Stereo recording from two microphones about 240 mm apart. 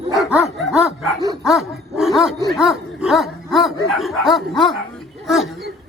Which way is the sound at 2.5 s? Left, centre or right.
Centre.